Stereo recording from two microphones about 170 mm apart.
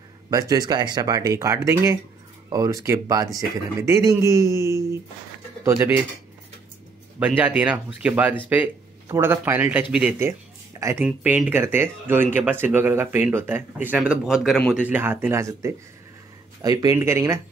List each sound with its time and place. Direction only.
0.3 s speech: 20° right (ahead or behind)
7.2 s speech: 10° right (ahead or behind)